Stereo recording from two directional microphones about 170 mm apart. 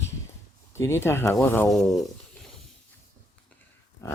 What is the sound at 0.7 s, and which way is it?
Speech, 15° left (ahead or behind).